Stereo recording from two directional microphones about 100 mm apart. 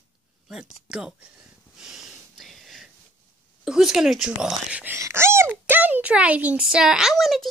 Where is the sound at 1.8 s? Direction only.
5° right (ahead or behind).